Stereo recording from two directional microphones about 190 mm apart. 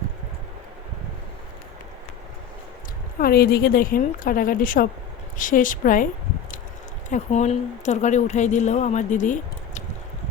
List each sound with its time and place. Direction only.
3.2 s a woman's voice: 50° left (ahead or behind)
7.1 s a woman's voice: 35° left (ahead or behind)